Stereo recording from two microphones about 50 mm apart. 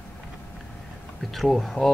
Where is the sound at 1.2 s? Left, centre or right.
Centre.